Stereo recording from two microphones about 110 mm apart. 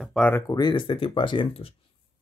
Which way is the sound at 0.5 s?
45° left (ahead or behind).